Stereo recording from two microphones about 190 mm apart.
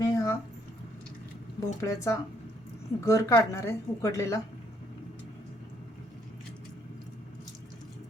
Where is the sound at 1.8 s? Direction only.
15° left (ahead or behind).